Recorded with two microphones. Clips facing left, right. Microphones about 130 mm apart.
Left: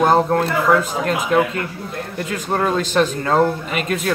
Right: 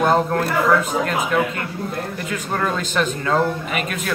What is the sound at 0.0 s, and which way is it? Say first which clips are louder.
Speech: left 3 dB; 30° left (ahead or behind).